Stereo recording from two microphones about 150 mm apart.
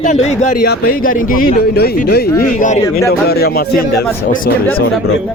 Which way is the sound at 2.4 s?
60° left (ahead or behind).